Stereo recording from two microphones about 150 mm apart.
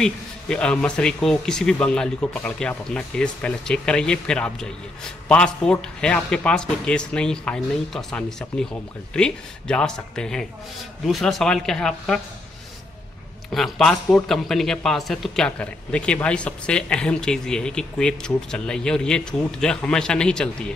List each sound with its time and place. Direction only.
0.0 s a man's voice: 5° left (ahead or behind)
13.5 s a man's voice: centre (ahead or behind)